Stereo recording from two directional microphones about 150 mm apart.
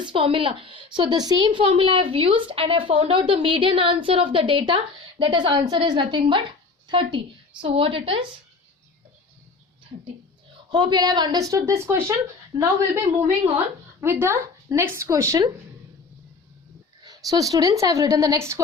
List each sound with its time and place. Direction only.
0.0 s a woman's voice: 35° right (ahead or behind)
10.7 s a woman's voice: 30° right (ahead or behind)
14.0 s speech: 15° right (ahead or behind)
17.0 s a woman's voice: 25° right (ahead or behind)